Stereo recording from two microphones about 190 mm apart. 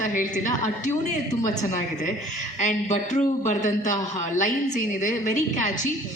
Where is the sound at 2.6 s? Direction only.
40° left (ahead or behind).